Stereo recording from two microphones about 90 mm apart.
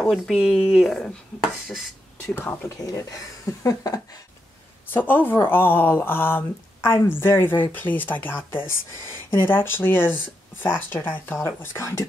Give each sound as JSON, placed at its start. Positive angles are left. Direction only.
{"t": 0.1, "sound": "speech", "side_deg": 0}
{"t": 2.4, "sound": "speech", "side_deg": 35}
{"t": 4.9, "sound": "speech", "side_deg": 20}